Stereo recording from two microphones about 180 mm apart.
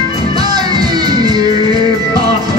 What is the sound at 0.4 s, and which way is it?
Music, 20° right (ahead or behind).